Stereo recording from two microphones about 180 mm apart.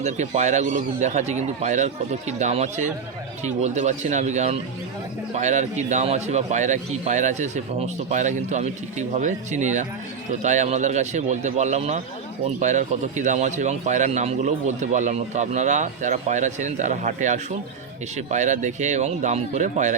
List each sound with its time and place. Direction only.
0.0 s a man's voice: 40° right (ahead or behind)